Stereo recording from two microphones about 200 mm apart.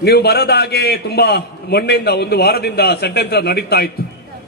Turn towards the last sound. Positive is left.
turn(degrees=50)  # may be behind; listen again after turning